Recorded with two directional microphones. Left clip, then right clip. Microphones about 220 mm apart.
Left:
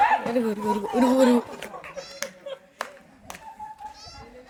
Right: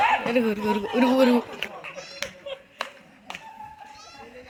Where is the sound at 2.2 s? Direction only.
10° left (ahead or behind).